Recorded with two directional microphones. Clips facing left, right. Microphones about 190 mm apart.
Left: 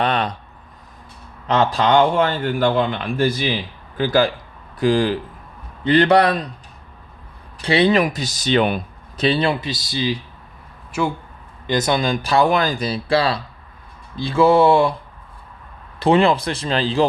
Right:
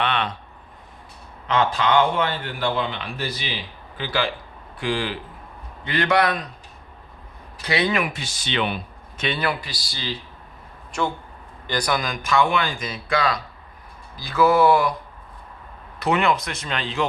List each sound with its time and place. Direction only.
0.0 s a sound: 40° left (ahead or behind)
1.5 s speech: 40° left (ahead or behind)
7.6 s speech: 30° left (ahead or behind)
10.9 s speech: 5° left (ahead or behind)
11.6 s speech: 20° left (ahead or behind)
16.0 s speech: 30° left (ahead or behind)